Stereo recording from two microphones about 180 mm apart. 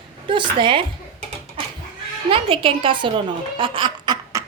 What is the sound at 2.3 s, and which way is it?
Speech, 30° right (ahead or behind).